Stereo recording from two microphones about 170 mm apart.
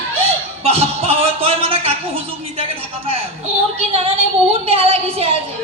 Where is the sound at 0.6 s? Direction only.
35° right (ahead or behind).